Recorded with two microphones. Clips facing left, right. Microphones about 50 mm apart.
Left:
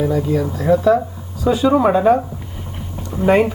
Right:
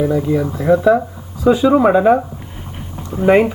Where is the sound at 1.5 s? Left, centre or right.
Centre.